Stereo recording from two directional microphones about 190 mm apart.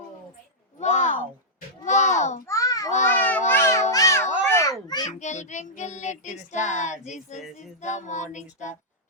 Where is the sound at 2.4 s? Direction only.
15° left (ahead or behind).